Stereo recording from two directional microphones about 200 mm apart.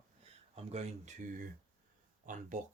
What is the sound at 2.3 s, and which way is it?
Speech, 40° right (ahead or behind).